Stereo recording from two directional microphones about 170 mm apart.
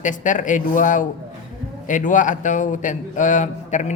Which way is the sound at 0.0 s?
50° left (ahead or behind).